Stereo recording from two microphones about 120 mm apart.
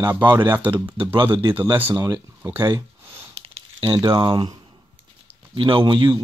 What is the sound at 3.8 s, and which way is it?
A man's voice, 40° right (ahead or behind).